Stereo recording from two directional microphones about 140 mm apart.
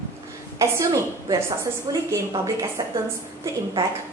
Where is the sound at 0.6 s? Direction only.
25° right (ahead or behind).